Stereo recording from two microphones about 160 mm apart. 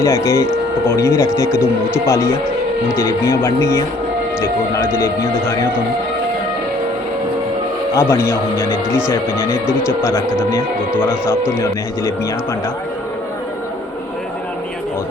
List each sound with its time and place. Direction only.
0.0 s a man's voice: 15° left (ahead or behind)
7.9 s a man's voice: 15° left (ahead or behind)
11.5 s a man's voice: 15° left (ahead or behind)